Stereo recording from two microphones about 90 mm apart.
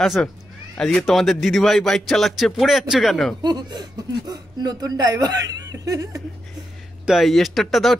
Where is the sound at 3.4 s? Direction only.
50° right (ahead or behind).